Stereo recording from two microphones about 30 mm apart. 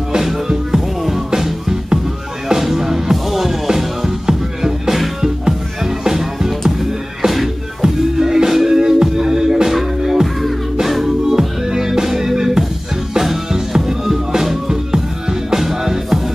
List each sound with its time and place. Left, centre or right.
0.5 s music: centre
6.0 s music: centre
7.8 s music: centre
10.8 s music: centre
11.2 s music: centre